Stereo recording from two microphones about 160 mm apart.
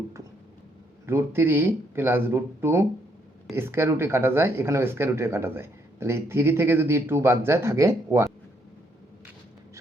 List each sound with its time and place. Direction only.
1.0 s speech: 15° right (ahead or behind)